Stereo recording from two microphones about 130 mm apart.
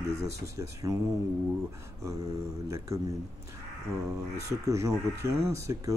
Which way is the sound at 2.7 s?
25° right (ahead or behind).